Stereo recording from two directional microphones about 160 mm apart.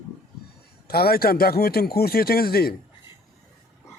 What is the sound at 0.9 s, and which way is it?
Speech, 75° left (ahead or behind).